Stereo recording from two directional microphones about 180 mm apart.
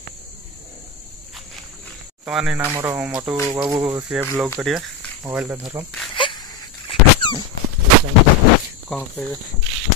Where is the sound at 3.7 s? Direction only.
20° right (ahead or behind).